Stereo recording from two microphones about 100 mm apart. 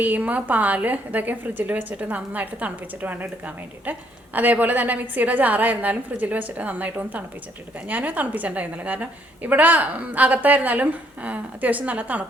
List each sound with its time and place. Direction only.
0.0 s a woman's voice: 15° right (ahead or behind)